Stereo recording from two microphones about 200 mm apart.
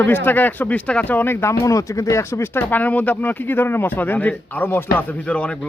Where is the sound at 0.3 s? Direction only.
10° left (ahead or behind).